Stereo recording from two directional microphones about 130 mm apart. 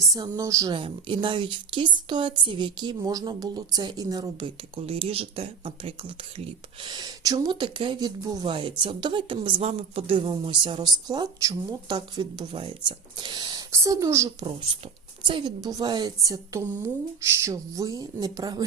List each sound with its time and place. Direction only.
0.0 s a woman's voice: 25° right (ahead or behind)
0.8 s speech: 40° right (ahead or behind)
4.9 s speech: 45° right (ahead or behind)
6.8 s speech: 35° right (ahead or behind)
8.5 s a woman's voice: 40° right (ahead or behind); by 14.3 s 25° right (ahead or behind)
15.2 s a woman's voice: 40° right (ahead or behind)